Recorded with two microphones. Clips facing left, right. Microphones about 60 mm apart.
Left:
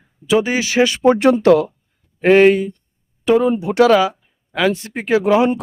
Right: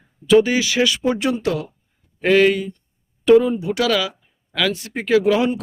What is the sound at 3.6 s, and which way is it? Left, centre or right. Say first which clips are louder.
A man's voice: left 7 dB; left.